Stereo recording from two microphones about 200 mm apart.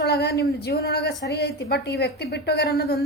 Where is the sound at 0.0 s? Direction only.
55° left (ahead or behind).